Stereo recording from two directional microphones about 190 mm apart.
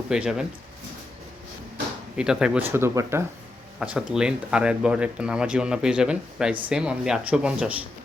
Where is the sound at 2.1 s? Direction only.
5° right (ahead or behind).